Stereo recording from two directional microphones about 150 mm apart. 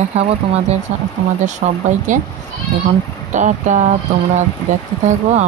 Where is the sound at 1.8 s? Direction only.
55° right (ahead or behind).